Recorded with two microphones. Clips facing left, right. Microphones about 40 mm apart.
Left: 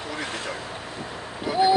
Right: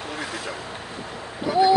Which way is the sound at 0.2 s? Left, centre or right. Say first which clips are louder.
Left 1 dB; left.